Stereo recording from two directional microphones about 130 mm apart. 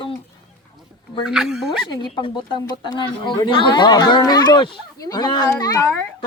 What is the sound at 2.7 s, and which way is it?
Speech, 35° left (ahead or behind).